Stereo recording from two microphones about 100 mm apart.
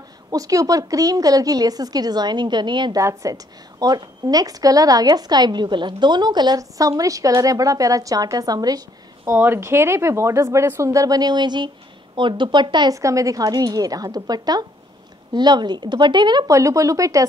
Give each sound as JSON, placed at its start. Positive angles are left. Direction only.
{"t": 0.3, "sound": "a woman's voice", "side_deg": -35}
{"t": 3.0, "sound": "a woman's voice", "side_deg": -30}
{"t": 9.3, "sound": "speech", "side_deg": -20}
{"t": 12.9, "sound": "a woman's voice", "side_deg": -35}
{"t": 16.4, "sound": "a woman's voice", "side_deg": -30}